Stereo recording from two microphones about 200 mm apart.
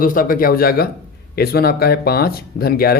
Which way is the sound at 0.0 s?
45° left (ahead or behind).